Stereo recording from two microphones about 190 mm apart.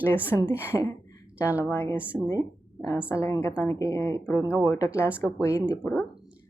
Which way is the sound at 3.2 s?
15° left (ahead or behind).